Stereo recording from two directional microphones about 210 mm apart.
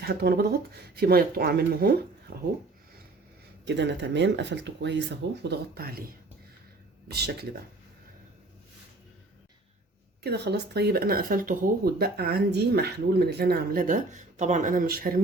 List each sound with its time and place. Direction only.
0.0 s speech: 50° right (ahead or behind)
3.7 s speech: 55° right (ahead or behind)
10.2 s speech: 50° right (ahead or behind)